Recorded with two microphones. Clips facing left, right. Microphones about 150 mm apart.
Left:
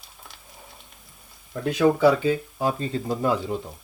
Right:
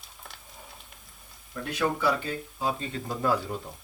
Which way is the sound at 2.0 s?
90° left.